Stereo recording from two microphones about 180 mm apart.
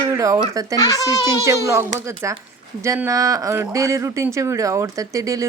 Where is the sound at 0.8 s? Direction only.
20° left (ahead or behind).